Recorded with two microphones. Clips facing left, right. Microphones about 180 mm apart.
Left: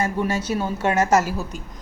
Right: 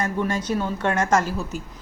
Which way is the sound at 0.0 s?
10° left (ahead or behind).